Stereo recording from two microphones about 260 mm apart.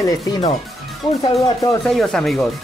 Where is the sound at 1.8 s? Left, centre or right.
Centre.